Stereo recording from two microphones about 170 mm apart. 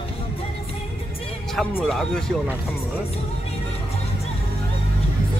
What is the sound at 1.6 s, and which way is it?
Speech, centre (ahead or behind).